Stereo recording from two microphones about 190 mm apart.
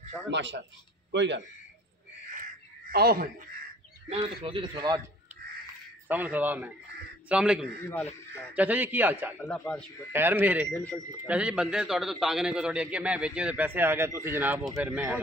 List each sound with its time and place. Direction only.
0.3 s speech: 70° right (ahead or behind)
2.9 s speech: 55° right (ahead or behind)
4.1 s a man's voice: 25° right (ahead or behind)
6.0 s a man's voice: 10° right (ahead or behind)
9.5 s a man's voice: 5° left (ahead or behind)
10.1 s a man's voice: 10° right (ahead or behind)
10.7 s a man's voice: 5° left (ahead or behind)
11.2 s a man's voice: 5° right (ahead or behind)